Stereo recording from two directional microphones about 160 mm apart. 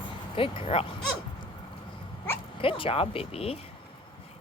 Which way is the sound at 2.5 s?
35° left (ahead or behind).